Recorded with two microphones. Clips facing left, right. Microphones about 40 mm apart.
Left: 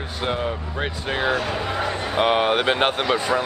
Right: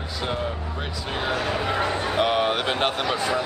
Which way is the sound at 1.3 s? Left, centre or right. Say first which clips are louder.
Even; centre.